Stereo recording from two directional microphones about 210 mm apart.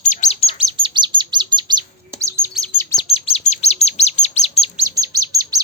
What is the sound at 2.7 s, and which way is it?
Chirp, 15° left (ahead or behind).